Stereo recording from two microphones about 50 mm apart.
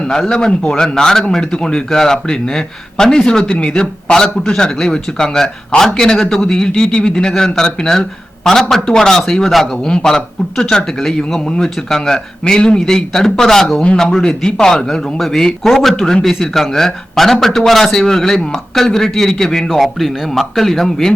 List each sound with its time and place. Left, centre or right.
0.0 s speech: centre
13.8 s speech: centre